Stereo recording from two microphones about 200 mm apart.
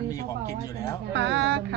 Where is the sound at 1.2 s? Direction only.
65° right (ahead or behind).